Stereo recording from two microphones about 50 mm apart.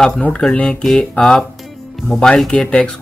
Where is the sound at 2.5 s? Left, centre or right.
Centre.